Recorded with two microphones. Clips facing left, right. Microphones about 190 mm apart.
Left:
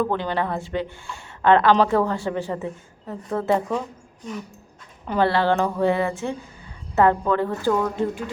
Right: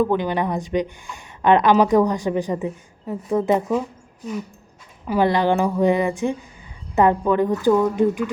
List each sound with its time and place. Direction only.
0.0 s a woman's voice: 15° right (ahead or behind)
5.0 s a woman's voice: 10° right (ahead or behind)